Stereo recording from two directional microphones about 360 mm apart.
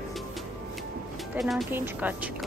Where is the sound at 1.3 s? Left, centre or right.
Centre.